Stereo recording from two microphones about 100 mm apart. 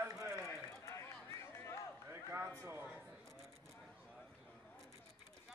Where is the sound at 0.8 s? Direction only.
25° left (ahead or behind).